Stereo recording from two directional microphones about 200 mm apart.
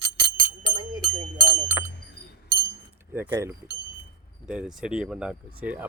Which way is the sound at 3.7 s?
55° right (ahead or behind).